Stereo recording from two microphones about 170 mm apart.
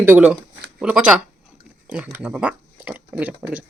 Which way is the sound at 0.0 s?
10° right (ahead or behind).